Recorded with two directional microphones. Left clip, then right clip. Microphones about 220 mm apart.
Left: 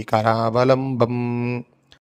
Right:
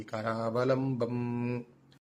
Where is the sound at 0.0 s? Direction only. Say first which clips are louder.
Left 15 dB; 50° left (ahead or behind).